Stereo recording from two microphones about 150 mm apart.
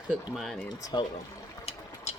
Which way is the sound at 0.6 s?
30° left (ahead or behind).